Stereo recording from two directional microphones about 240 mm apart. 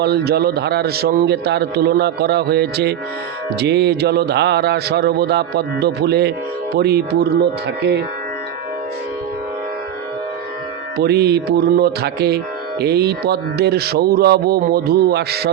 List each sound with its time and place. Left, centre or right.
0.0 s a man's voice: right
6.7 s music: right
7.8 s a man's voice: right
10.9 s a man's voice: right
12.8 s music: right